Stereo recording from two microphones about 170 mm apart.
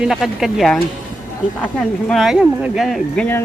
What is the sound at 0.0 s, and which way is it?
Speech, centre (ahead or behind).